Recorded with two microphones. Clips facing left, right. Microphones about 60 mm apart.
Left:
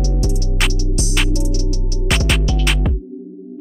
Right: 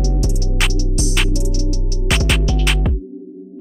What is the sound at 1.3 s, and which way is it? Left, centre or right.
Music, left.